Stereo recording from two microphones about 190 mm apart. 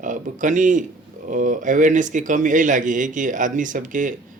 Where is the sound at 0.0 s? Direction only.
40° right (ahead or behind).